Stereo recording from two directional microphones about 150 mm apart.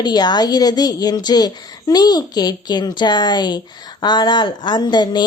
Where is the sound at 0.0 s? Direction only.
30° left (ahead or behind).